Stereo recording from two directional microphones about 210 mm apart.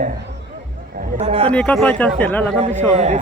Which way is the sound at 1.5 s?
5° left (ahead or behind).